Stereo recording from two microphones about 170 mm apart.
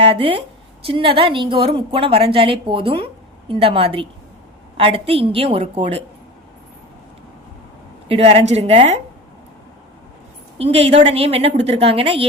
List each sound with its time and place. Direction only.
0.0 s a woman's voice: 35° right (ahead or behind)
8.0 s a woman's voice: 35° right (ahead or behind)
10.6 s a woman's voice: 35° right (ahead or behind)